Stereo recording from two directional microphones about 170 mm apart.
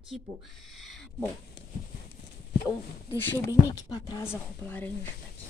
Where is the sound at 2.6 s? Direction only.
15° left (ahead or behind).